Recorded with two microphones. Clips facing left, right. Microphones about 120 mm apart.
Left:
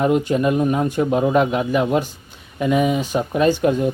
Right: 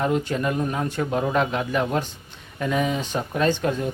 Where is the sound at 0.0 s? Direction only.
15° left (ahead or behind).